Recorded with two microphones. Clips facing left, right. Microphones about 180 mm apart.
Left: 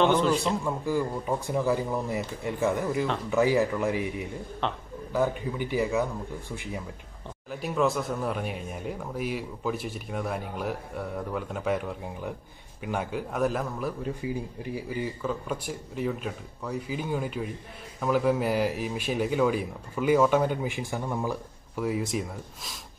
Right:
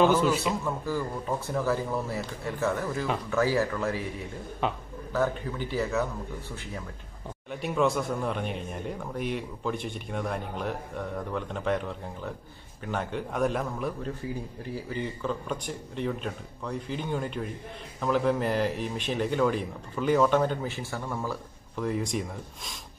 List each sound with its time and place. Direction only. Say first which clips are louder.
0.0 s a man's voice: even; 5° right (ahead or behind)
0.7 s a man's voice: left 3 dB; 15° left (ahead or behind)
4.6 s a man's voice: right 2 dB; 5° right (ahead or behind)
5.1 s a man's voice: left 1 dB; 15° left (ahead or behind)
7.5 s a man's voice: even; centre (ahead or behind)